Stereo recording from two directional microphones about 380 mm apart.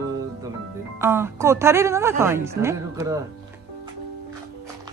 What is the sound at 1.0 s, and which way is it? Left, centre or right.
A woman's voice, centre.